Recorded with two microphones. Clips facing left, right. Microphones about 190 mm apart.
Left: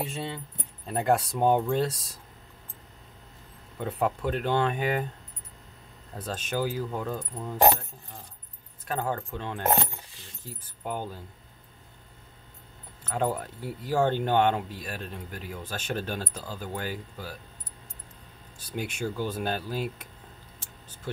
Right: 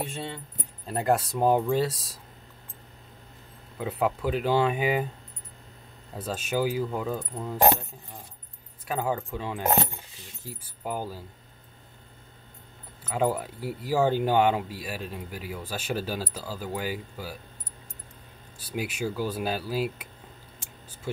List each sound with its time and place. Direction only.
0.0 s speech: centre (ahead or behind)
3.7 s speech: 5° right (ahead or behind)
6.1 s speech: 10° right (ahead or behind)
8.8 s speech: 5° right (ahead or behind)
13.1 s speech: 10° right (ahead or behind)
18.6 s speech: 5° right (ahead or behind)